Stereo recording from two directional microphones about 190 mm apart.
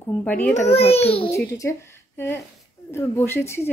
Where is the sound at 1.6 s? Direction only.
15° left (ahead or behind).